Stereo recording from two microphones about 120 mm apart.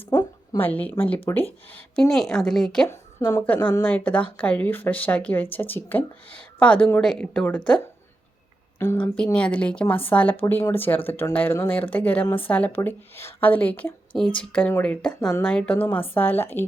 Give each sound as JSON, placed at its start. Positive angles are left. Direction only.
{"t": 0.5, "sound": "speech", "side_deg": 15}
{"t": 2.0, "sound": "a woman's voice", "side_deg": 5}
{"t": 2.9, "sound": "speech", "side_deg": 20}
{"t": 8.8, "sound": "a woman's voice", "side_deg": 20}